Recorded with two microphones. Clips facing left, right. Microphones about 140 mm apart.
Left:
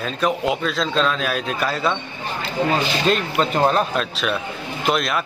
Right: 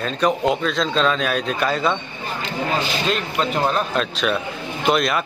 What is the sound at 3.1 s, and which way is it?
A man's voice, centre (ahead or behind).